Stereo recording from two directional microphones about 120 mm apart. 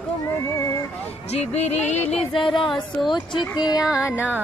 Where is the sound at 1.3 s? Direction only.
60° left (ahead or behind).